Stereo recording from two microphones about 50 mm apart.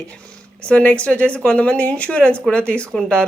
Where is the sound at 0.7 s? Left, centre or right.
Left.